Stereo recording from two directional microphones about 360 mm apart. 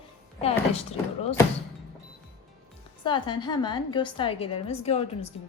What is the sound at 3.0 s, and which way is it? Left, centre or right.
A woman's voice, centre.